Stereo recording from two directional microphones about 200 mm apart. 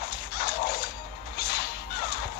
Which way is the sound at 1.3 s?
50° left (ahead or behind).